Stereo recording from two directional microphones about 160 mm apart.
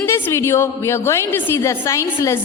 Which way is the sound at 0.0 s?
15° left (ahead or behind).